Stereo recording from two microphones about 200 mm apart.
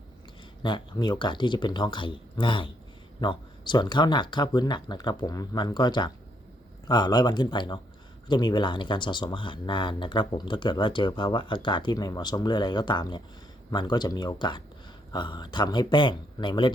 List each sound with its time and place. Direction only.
0.6 s speech: 20° left (ahead or behind)